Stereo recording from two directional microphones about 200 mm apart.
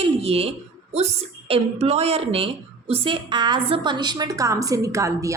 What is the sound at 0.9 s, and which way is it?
A woman's voice, 30° right (ahead or behind).